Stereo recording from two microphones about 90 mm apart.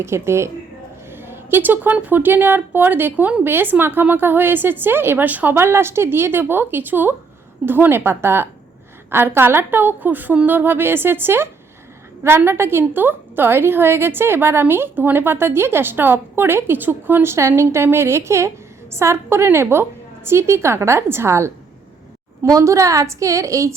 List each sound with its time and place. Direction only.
0.0 s a woman's voice: 30° right (ahead or behind)
12.5 s a woman's voice: 25° right (ahead or behind)